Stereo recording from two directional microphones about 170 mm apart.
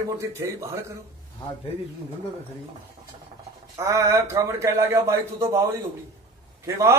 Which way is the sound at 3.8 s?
20° right (ahead or behind).